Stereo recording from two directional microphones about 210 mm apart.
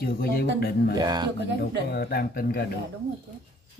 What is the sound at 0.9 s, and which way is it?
Speech, 20° right (ahead or behind).